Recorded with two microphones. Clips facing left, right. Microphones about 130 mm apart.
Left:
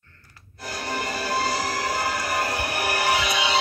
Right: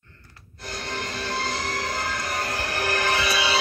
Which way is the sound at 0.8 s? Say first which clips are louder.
Left 4 dB; 10° left (ahead or behind).